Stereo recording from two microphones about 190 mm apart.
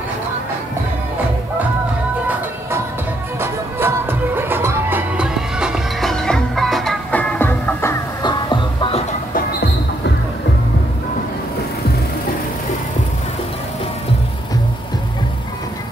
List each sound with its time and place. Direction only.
3.3 s music: 10° right (ahead or behind); by 7.9 s 10° left (ahead or behind)
8.2 s music: 25° left (ahead or behind)